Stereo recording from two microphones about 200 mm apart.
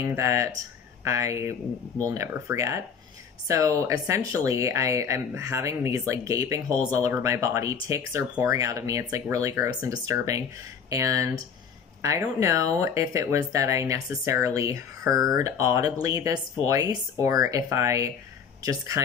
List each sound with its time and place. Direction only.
0.0 s speech: 15° right (ahead or behind)